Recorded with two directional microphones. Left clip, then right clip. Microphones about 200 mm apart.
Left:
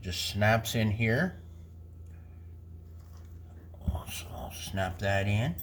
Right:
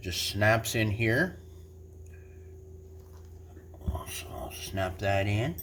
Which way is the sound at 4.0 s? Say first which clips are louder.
Right 3 dB; 35° right (ahead or behind).